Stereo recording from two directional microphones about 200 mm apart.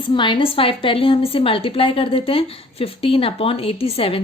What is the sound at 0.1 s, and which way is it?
A woman's voice, 25° left (ahead or behind).